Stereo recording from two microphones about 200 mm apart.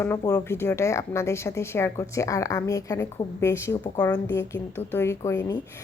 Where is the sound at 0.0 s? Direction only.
10° left (ahead or behind).